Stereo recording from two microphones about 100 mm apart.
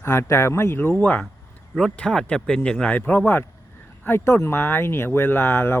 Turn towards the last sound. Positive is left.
turn(degrees=25)  # may be behind; listen again after turning